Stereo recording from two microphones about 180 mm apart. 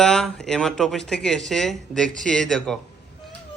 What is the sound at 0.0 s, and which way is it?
Speech, 5° left (ahead or behind).